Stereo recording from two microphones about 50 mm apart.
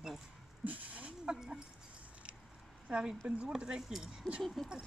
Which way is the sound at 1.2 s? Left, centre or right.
Centre.